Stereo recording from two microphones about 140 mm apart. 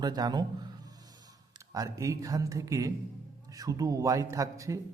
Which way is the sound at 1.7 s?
25° right (ahead or behind).